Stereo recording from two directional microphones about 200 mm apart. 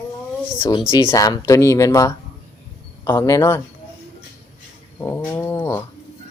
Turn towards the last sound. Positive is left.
turn(degrees=10)  # may be behind; listen again after turning